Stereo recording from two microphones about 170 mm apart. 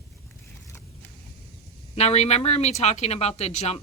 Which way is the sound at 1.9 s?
40° left (ahead or behind).